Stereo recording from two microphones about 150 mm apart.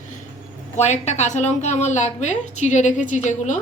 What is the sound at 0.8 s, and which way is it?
A woman's voice, 50° left (ahead or behind).